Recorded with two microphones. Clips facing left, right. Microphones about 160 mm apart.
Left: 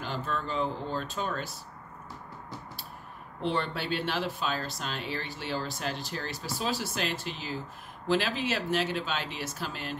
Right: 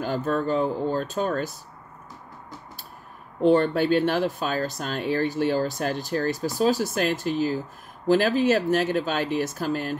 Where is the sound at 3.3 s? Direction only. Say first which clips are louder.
Right 12 dB; 45° right (ahead or behind).